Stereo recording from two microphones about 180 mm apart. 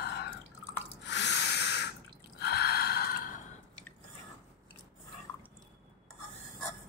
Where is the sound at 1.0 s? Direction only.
75° left (ahead or behind).